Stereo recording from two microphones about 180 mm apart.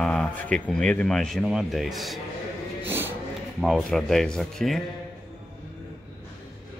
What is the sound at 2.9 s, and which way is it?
Music, 10° right (ahead or behind).